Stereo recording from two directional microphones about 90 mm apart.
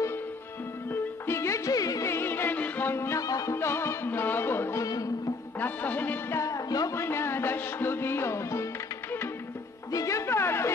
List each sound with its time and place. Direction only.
1.2 s music: 30° left (ahead or behind)
1.7 s music: 40° left (ahead or behind)
3.2 s music: 40° left (ahead or behind)
3.5 s music: 30° left (ahead or behind)
4.8 s music: 40° left (ahead or behind)
5.6 s music: 20° left (ahead or behind)
6.3 s music: 40° left (ahead or behind)
7.0 s music: 25° left (ahead or behind)
9.9 s music: 35° left (ahead or behind)